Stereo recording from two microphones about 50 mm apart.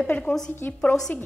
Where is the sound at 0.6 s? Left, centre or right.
Left.